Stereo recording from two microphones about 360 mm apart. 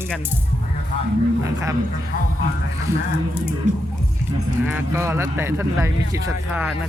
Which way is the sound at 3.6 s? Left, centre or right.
Centre.